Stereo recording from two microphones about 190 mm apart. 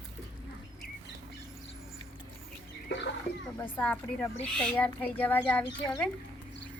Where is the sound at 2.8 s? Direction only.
65° left (ahead or behind).